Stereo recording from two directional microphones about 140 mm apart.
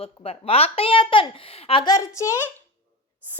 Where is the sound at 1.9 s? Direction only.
25° left (ahead or behind).